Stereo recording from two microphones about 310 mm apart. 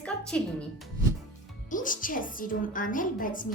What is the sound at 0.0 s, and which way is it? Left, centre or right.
Speech, centre.